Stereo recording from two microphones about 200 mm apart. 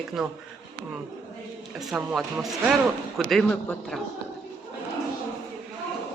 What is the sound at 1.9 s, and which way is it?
Speech, centre (ahead or behind).